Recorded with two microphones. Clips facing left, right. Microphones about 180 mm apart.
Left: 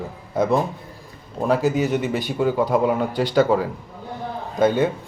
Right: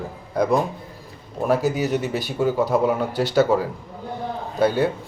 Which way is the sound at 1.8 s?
15° left (ahead or behind).